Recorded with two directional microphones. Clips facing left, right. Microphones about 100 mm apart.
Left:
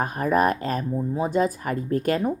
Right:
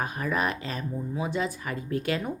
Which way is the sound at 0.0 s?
45° left (ahead or behind).